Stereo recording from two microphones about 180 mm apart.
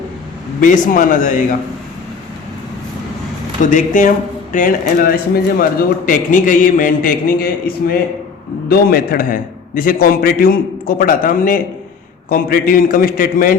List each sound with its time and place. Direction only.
0.6 s a man's voice: 45° left (ahead or behind)
3.6 s a man's voice: 45° left (ahead or behind)